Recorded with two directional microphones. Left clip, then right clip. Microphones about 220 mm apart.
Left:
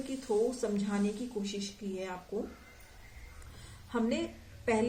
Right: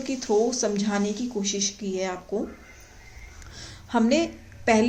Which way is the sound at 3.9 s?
50° right (ahead or behind).